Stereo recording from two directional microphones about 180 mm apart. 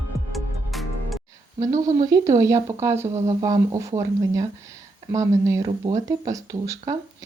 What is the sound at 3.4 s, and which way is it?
Speech, 20° right (ahead or behind).